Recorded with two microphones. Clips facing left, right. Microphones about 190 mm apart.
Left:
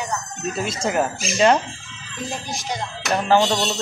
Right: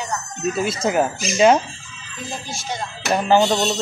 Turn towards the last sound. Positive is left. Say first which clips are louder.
# right 2 dB
turn(degrees=-10)  # may be behind; listen again after turning